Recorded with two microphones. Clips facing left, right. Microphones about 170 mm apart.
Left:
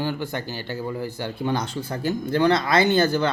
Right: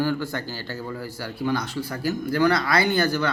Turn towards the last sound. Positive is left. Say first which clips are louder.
# left 3 dB
turn(degrees=25)  # may be behind; listen again after turning